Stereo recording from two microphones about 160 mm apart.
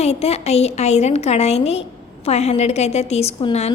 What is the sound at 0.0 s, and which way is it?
A woman's voice, 40° left (ahead or behind).